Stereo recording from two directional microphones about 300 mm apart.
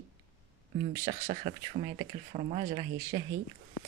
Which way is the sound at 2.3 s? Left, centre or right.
Right.